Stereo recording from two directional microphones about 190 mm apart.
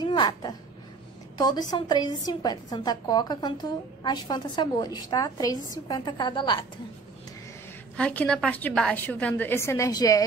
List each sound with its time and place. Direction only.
0.0 s a woman's voice: 25° left (ahead or behind)
7.9 s a woman's voice: 5° left (ahead or behind)